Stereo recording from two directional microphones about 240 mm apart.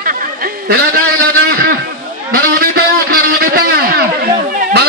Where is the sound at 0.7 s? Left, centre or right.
Right.